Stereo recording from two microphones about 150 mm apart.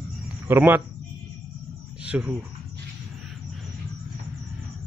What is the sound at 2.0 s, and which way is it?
Speech, 10° right (ahead or behind).